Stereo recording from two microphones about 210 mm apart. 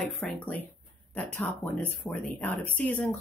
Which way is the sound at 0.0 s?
5° left (ahead or behind).